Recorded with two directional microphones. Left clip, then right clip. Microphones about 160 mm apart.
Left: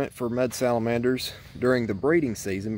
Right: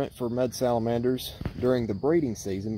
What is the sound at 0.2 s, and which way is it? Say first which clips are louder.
Speech: left 2 dB; 15° left (ahead or behind).